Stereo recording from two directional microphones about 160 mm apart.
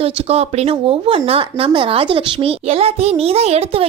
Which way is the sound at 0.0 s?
40° right (ahead or behind).